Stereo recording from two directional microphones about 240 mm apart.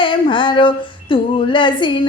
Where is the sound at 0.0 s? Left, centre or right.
Centre.